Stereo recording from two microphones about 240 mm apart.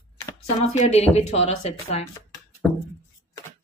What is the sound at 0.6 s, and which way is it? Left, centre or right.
Speech, left.